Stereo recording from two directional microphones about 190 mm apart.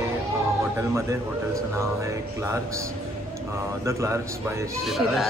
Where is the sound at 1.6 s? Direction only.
15° right (ahead or behind).